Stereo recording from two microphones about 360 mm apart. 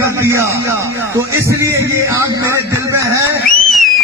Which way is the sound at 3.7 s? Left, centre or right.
Centre.